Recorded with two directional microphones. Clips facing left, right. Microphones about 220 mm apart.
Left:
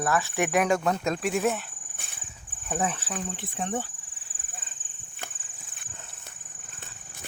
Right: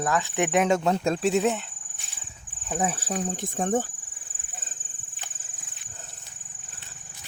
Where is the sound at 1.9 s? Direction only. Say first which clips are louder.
Left 4 dB; 55° left (ahead or behind).